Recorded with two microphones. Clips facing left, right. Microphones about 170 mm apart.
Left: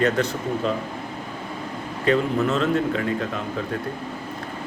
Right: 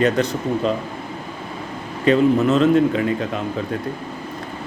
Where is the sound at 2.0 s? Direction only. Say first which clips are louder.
Right 6 dB; 20° right (ahead or behind).